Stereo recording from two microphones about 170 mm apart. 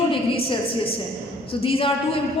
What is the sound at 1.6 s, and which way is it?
Speech, 30° left (ahead or behind).